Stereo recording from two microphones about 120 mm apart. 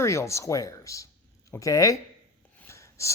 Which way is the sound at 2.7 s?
25° left (ahead or behind).